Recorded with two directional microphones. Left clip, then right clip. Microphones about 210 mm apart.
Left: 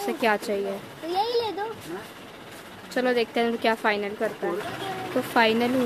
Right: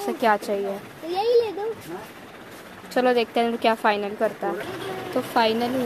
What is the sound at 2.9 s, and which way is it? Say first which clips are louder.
Speech: right 3 dB; centre (ahead or behind).